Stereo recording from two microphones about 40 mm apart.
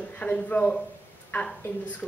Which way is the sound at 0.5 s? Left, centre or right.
Left.